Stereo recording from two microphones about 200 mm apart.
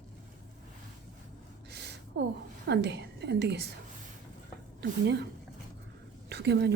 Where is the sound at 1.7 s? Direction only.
55° right (ahead or behind).